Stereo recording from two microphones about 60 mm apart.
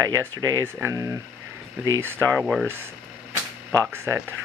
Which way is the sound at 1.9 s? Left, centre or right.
Right.